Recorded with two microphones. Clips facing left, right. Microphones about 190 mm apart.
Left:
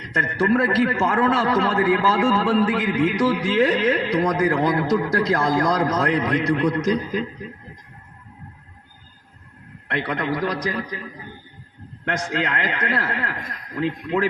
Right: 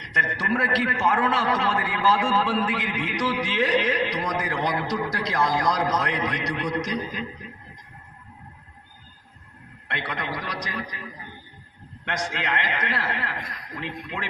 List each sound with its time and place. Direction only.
0.3 s a man's voice: 50° left (ahead or behind)
9.9 s a man's voice: 50° left (ahead or behind)
12.0 s a man's voice: 50° left (ahead or behind)